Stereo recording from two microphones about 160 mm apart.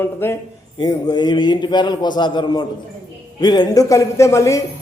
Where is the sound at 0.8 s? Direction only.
25° left (ahead or behind).